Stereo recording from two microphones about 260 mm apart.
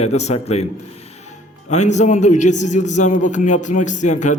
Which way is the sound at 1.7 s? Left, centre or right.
Left.